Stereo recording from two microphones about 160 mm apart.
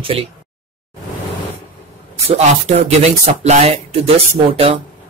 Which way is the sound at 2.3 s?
40° right (ahead or behind).